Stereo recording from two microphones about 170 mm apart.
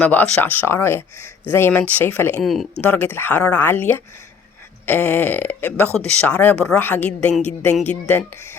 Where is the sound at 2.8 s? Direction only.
10° left (ahead or behind).